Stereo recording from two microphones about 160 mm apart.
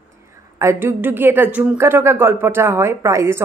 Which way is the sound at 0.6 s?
15° right (ahead or behind).